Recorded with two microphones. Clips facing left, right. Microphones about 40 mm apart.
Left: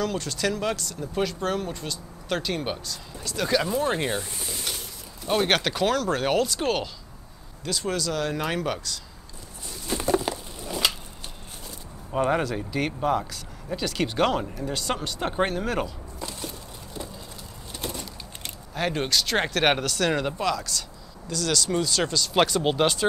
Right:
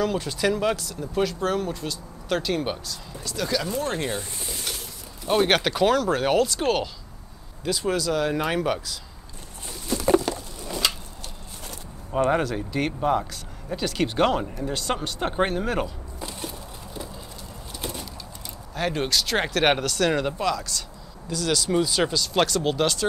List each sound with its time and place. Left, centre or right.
0.0 s speech: centre
3.3 s speech: centre
9.9 s bird: left
10.3 s a sound: centre
12.3 s speech: centre
17.7 s a sound: centre
18.8 s speech: centre
22.2 s speech: centre